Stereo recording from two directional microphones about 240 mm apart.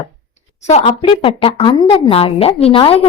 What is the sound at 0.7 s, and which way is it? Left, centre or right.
Speech, left.